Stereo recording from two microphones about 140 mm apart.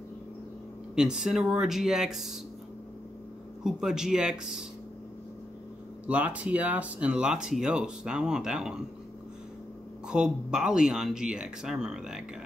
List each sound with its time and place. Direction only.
0.9 s speech: 5° right (ahead or behind)
3.6 s speech: 5° right (ahead or behind)
6.0 s speech: 10° right (ahead or behind)
10.0 s speech: 5° right (ahead or behind)